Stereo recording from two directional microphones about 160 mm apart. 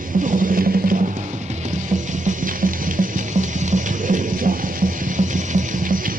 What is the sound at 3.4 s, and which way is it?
Music, 50° right (ahead or behind).